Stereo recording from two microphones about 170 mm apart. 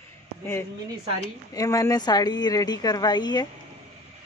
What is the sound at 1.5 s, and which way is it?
Speech, 20° left (ahead or behind).